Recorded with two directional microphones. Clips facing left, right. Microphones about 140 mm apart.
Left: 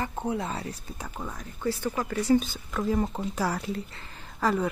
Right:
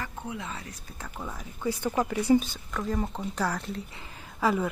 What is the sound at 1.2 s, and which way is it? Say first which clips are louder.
Speech: left 1 dB; 5° right (ahead or behind).